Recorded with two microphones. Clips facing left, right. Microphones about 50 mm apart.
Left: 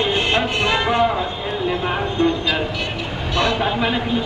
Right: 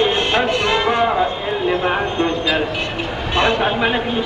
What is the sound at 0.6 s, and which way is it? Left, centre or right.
Speech, centre.